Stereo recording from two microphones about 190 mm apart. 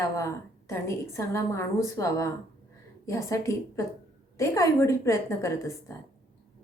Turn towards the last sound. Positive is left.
turn(degrees=15)  # may be behind; listen again after turning